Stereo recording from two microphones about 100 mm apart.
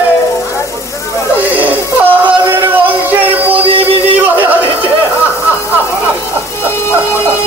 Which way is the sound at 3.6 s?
70° right (ahead or behind).